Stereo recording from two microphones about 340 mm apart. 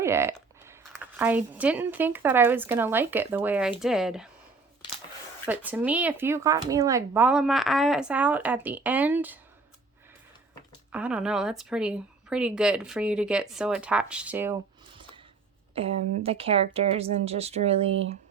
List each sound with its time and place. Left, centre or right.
0.0 s speech: centre
5.5 s speech: centre
10.9 s speech: centre
15.7 s speech: centre